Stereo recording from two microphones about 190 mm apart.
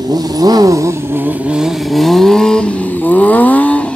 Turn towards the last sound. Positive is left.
turn(degrees=5)  # may be behind; listen again after turning